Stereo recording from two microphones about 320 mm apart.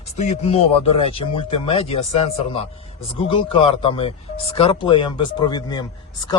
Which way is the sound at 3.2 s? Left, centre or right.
Centre.